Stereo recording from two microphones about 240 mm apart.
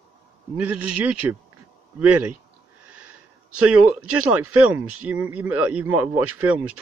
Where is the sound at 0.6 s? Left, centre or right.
Right.